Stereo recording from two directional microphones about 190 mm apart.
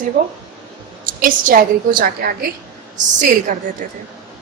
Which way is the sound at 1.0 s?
45° right (ahead or behind).